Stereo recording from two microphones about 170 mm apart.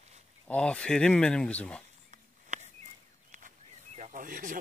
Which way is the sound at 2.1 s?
45° right (ahead or behind).